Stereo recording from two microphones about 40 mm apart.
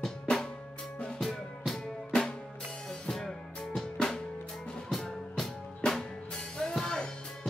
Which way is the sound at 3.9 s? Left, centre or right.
Centre.